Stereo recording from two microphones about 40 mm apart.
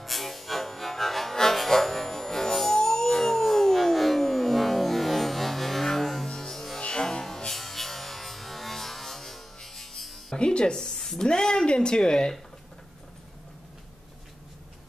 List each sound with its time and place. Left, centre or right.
0.0 s music: centre
6.2 s music: centre
6.8 s music: centre
10.3 s music: left
10.9 s speech: centre